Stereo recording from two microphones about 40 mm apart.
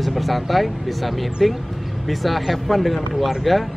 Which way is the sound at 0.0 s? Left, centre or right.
Centre.